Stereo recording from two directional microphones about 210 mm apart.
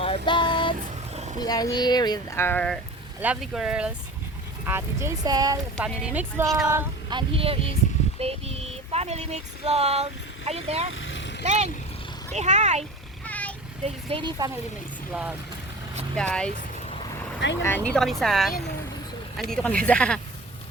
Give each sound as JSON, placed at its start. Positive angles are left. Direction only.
{"t": 0.0, "sound": "vehicle", "side_deg": 25}
{"t": 1.1, "sound": "vehicle", "side_deg": -30}
{"t": 1.4, "sound": "speech", "side_deg": 20}
{"t": 3.2, "sound": "speech", "side_deg": -5}
{"t": 5.7, "sound": "speech", "side_deg": -5}
{"t": 6.7, "sound": "speech", "side_deg": -20}
{"t": 10.9, "sound": "vehicle", "side_deg": 65}
{"t": 11.4, "sound": "speech", "side_deg": -30}
{"t": 13.2, "sound": "a sound", "side_deg": 5}
{"t": 13.8, "sound": "speech", "side_deg": -25}
{"t": 15.1, "sound": "speech", "side_deg": -5}
{"t": 17.5, "sound": "speech", "side_deg": 10}